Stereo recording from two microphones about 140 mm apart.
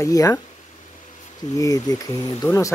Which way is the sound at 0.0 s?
20° left (ahead or behind).